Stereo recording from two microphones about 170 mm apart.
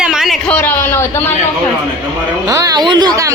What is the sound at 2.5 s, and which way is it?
Speech, 20° right (ahead or behind).